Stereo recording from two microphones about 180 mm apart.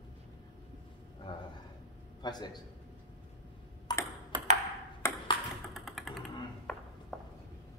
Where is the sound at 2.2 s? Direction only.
20° left (ahead or behind).